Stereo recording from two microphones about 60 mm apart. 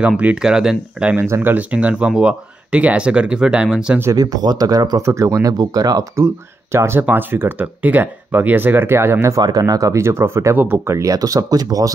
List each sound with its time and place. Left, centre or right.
0.2 s speech: centre
1.4 s speech: right
4.1 s speech: right
5.0 s speech: right
6.1 s speech: right
7.0 s speech: right
9.3 s speech: right
10.0 s speech: right
10.5 s speech: right
10.9 s speech: right